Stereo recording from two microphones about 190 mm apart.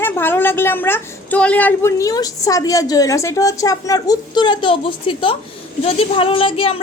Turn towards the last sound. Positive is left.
turn(degrees=30)  # may be behind; listen again after turning